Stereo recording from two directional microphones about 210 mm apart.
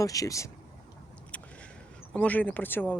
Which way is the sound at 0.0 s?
15° left (ahead or behind).